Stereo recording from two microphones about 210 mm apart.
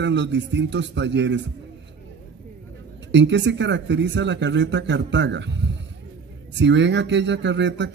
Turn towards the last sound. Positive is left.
turn(degrees=-60)  # may be behind; listen again after turning